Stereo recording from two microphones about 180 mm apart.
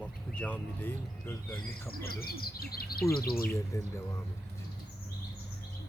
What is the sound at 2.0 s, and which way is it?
Speech, 55° left (ahead or behind).